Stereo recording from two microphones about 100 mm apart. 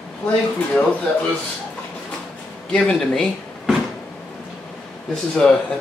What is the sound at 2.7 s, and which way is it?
Speech, 5° left (ahead or behind).